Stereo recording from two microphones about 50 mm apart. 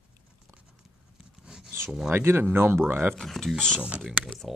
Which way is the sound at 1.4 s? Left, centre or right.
Centre.